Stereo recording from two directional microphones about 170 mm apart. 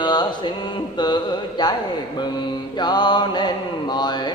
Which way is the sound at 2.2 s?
25° left (ahead or behind).